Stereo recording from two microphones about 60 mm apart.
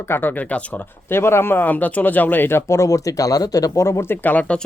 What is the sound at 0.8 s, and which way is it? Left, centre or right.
Speech, left.